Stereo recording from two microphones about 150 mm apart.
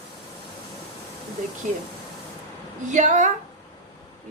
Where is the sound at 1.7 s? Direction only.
55° right (ahead or behind).